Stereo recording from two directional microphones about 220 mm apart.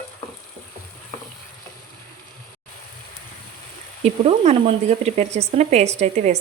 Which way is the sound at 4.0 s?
30° right (ahead or behind).